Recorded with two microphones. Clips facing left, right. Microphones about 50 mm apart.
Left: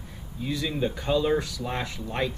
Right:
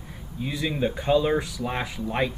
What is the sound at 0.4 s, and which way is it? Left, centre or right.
Speech, centre.